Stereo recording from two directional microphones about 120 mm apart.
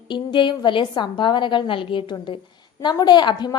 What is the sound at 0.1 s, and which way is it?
A woman's voice, 40° left (ahead or behind).